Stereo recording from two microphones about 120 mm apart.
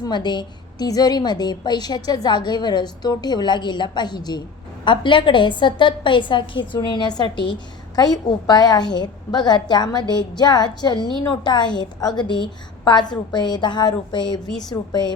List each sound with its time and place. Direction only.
0.0 s a woman's voice: 40° left (ahead or behind)